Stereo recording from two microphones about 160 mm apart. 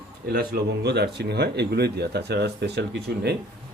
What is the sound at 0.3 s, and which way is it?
A man's voice, 75° right (ahead or behind).